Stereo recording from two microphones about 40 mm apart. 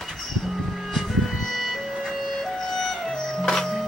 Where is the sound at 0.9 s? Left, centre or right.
Centre.